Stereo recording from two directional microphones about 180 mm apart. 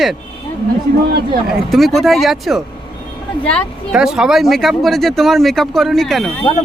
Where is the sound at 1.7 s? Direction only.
Centre (ahead or behind).